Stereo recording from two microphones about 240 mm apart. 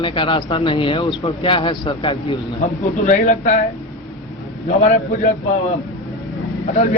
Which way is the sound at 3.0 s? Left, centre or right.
Left.